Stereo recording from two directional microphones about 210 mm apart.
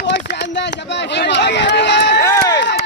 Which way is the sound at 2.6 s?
55° left (ahead or behind).